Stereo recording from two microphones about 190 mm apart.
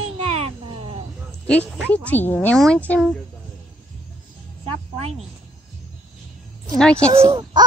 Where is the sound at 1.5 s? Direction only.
5° left (ahead or behind).